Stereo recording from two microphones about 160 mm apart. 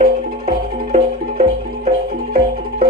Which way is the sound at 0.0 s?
45° right (ahead or behind).